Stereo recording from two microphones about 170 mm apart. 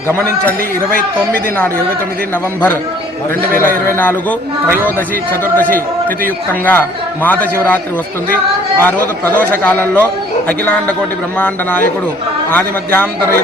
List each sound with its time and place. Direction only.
0.9 s a man's voice: 60° right (ahead or behind)
3.8 s a man's voice: 10° left (ahead or behind)
5.5 s a man's voice: 10° left (ahead or behind)
8.8 s a man's voice: 10° left (ahead or behind)
11.3 s a man's voice: 10° left (ahead or behind)